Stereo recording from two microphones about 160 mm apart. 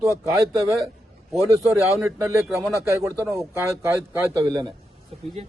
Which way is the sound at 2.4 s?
20° right (ahead or behind).